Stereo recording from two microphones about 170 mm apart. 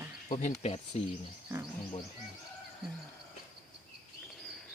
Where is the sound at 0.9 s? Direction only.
40° left (ahead or behind).